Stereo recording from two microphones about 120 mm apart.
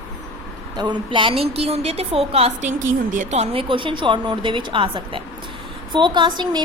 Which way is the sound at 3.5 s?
45° right (ahead or behind).